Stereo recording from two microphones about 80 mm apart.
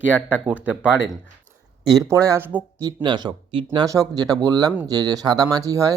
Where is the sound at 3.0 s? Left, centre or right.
Right.